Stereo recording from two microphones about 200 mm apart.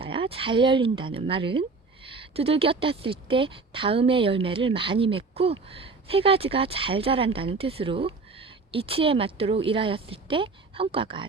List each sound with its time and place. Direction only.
0.0 s a woman's voice: 25° right (ahead or behind)